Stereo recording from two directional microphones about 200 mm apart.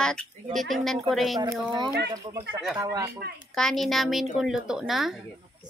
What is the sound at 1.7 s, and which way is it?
Speech, 20° right (ahead or behind).